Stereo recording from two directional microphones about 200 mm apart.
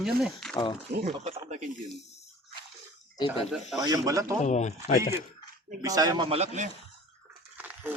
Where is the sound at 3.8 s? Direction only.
20° right (ahead or behind).